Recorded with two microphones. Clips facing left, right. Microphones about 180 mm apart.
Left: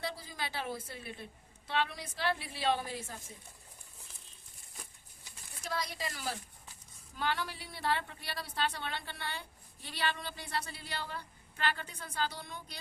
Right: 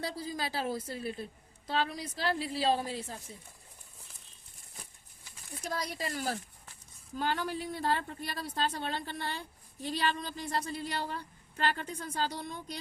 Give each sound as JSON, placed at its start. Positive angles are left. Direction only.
{"t": 0.0, "sound": "a woman's voice", "side_deg": -35}
{"t": 5.8, "sound": "a woman's voice", "side_deg": -40}